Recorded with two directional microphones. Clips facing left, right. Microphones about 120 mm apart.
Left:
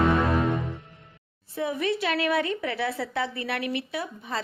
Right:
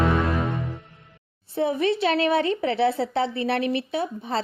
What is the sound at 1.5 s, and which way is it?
Speech, 30° right (ahead or behind).